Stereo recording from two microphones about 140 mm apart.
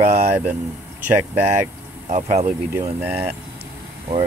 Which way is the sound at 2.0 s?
55° right (ahead or behind).